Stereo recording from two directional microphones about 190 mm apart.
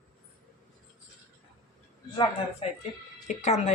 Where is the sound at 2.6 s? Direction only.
30° left (ahead or behind).